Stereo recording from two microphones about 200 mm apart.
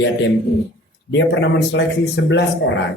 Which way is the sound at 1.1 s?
65° left (ahead or behind).